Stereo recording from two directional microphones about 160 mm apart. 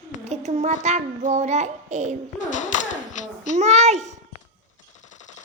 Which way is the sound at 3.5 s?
45° right (ahead or behind).